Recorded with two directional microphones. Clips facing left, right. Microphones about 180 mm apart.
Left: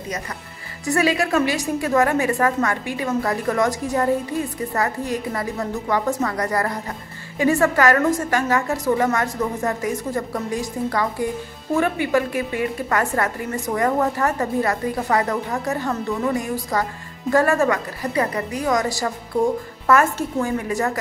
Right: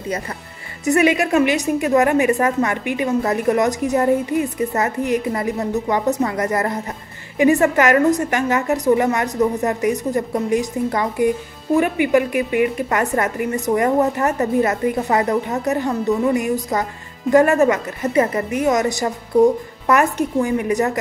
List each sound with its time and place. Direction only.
0.8 s a woman's voice: 20° right (ahead or behind)